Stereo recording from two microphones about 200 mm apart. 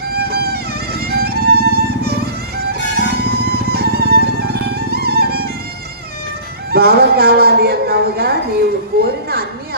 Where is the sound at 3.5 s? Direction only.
50° right (ahead or behind).